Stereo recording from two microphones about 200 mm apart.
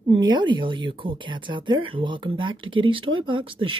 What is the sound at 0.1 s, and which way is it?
Speech, 20° right (ahead or behind).